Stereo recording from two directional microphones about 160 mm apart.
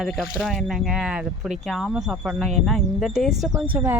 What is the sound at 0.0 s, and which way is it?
Speech, centre (ahead or behind).